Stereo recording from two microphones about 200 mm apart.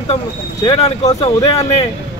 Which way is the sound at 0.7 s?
30° left (ahead or behind).